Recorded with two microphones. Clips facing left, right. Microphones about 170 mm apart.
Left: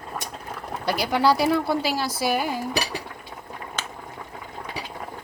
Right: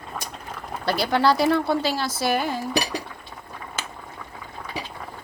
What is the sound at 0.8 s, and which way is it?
Speech, 10° left (ahead or behind).